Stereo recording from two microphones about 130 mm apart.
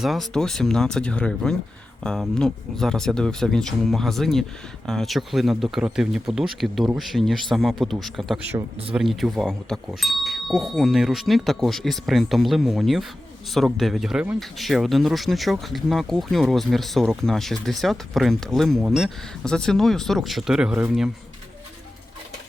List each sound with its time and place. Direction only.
0.0 s speech: centre (ahead or behind)